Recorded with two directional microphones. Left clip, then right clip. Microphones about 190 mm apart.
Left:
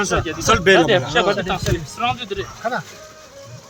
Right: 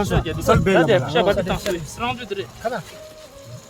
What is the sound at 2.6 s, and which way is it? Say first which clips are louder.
Speech: left 3 dB; 50° right (ahead or behind).